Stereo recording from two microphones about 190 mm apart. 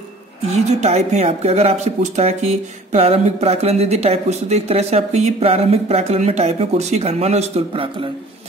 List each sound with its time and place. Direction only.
0.5 s a woman's voice: 35° right (ahead or behind)